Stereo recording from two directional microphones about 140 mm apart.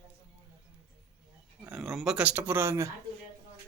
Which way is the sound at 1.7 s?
Centre (ahead or behind).